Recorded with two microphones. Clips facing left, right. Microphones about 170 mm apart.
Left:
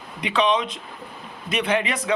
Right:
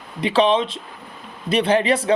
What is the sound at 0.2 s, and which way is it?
Speech, 30° right (ahead or behind).